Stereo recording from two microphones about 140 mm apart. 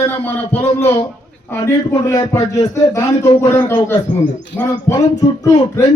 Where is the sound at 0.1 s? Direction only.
15° left (ahead or behind).